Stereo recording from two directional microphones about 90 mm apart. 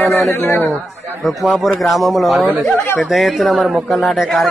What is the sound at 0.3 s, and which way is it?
Speech, 30° left (ahead or behind).